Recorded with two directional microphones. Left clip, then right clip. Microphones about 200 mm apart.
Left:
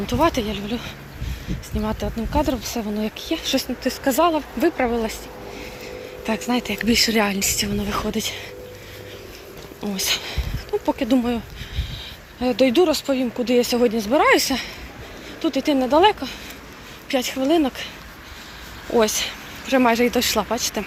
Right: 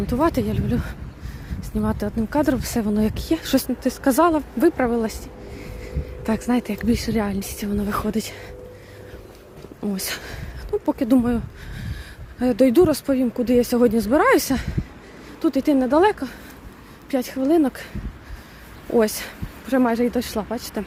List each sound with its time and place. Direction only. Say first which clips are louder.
0.1 s speech: left 2 dB; 30° right (ahead or behind)
6.2 s speech: even; 30° right (ahead or behind)
9.8 s speech: left 5 dB; 30° right (ahead or behind)
12.4 s speech: right 1 dB; 35° right (ahead or behind)
18.9 s speech: left 1 dB; 35° right (ahead or behind)
19.8 s speech: left 4 dB; 20° right (ahead or behind)